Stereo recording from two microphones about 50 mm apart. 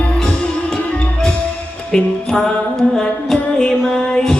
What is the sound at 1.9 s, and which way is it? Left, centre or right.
Music, centre.